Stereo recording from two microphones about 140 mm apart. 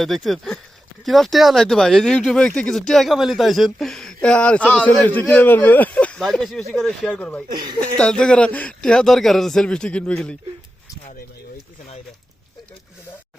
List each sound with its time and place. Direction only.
0.0 s speech: centre (ahead or behind)
7.5 s speech: 30° right (ahead or behind)
7.8 s speech: 5° left (ahead or behind)